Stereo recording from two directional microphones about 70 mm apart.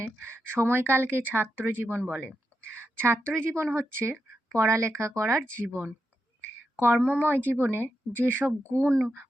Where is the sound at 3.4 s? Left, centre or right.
Right.